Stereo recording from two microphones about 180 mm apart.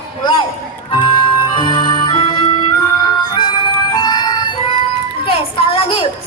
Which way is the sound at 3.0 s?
25° left (ahead or behind).